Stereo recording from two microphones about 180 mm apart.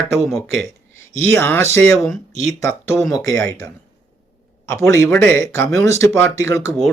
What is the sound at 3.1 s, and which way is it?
A man's voice, 15° left (ahead or behind).